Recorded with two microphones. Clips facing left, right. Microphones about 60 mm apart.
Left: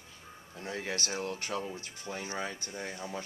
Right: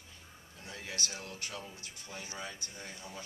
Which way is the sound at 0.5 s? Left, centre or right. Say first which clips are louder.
Left 6 dB; left.